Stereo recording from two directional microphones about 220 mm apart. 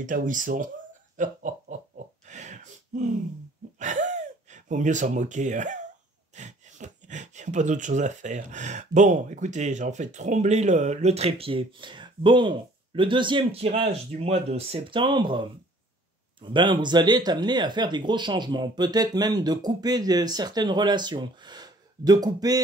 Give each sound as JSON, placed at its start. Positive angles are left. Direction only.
{"t": 0.0, "sound": "speech", "side_deg": -35}
{"t": 1.1, "sound": "laughter", "side_deg": -35}
{"t": 2.2, "sound": "gasp", "side_deg": -35}
{"t": 3.8, "sound": "speech", "side_deg": -35}